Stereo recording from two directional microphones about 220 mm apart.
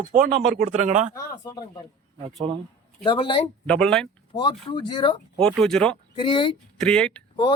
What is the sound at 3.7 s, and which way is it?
Speech, 5° left (ahead or behind).